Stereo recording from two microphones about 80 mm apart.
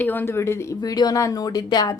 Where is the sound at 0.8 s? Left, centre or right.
Left.